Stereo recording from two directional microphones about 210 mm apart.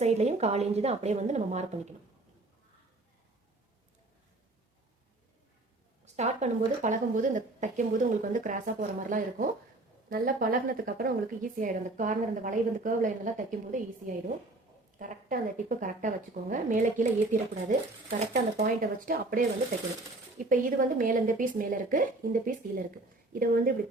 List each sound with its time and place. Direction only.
0.0 s a woman's voice: 30° right (ahead or behind)
6.1 s a woman's voice: 30° right (ahead or behind)
14.9 s a woman's voice: 40° right (ahead or behind)
20.5 s a woman's voice: 40° right (ahead or behind)